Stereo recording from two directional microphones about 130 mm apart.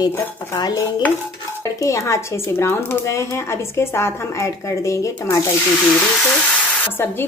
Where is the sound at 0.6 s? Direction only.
30° left (ahead or behind).